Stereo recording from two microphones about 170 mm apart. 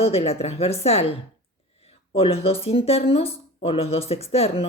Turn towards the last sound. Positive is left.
turn(degrees=35)  # may be behind; listen again after turning